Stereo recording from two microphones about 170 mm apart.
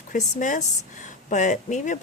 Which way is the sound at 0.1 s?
50° left (ahead or behind).